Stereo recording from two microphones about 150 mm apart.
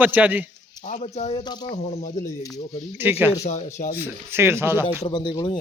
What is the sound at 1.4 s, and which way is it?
Speech, 30° left (ahead or behind).